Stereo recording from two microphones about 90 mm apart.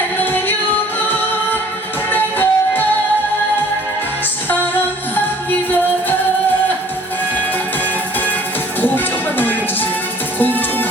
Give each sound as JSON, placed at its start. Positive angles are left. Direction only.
{"t": 0.2, "sound": "music", "side_deg": 20}
{"t": 4.4, "sound": "music", "side_deg": 20}
{"t": 10.3, "sound": "music", "side_deg": 20}